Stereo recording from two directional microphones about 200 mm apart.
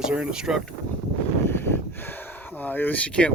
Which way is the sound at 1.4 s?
10° left (ahead or behind).